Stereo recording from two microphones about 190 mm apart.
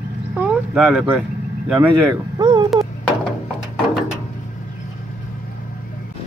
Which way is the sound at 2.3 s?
20° right (ahead or behind).